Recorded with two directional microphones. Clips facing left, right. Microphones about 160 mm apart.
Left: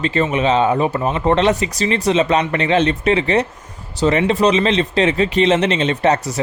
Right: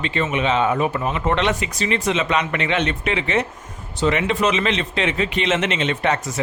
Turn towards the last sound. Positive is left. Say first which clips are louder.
# left 5 dB
turn(degrees=35)  # may be behind; listen again after turning